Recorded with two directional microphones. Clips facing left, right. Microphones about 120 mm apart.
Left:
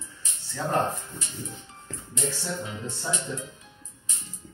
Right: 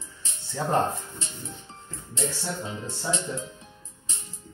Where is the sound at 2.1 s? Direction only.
30° right (ahead or behind).